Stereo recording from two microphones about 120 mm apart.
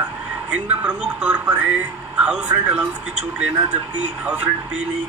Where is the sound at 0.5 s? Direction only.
10° right (ahead or behind).